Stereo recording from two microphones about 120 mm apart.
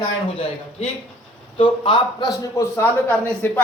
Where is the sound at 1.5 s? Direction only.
45° left (ahead or behind).